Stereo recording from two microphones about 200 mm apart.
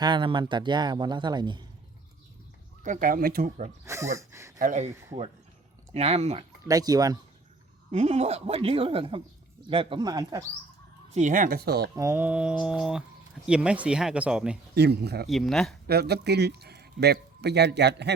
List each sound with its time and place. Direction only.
0.0 s speech: 25° right (ahead or behind)
2.8 s speech: 40° right (ahead or behind)
3.8 s speech: 15° right (ahead or behind)
4.5 s speech: 40° right (ahead or behind)
5.9 s speech: 30° right (ahead or behind)
6.7 s speech: 20° right (ahead or behind)
7.9 s speech: 30° right (ahead or behind)
11.1 s speech: 40° right (ahead or behind)
11.9 s speech: 15° right (ahead or behind)
14.8 s speech: 55° right (ahead or behind)
15.3 s speech: centre (ahead or behind)
15.9 s speech: 55° right (ahead or behind)